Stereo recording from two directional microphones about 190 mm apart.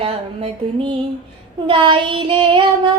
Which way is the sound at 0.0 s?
30° right (ahead or behind).